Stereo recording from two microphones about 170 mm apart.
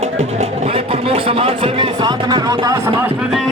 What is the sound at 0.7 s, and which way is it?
Music, 35° right (ahead or behind).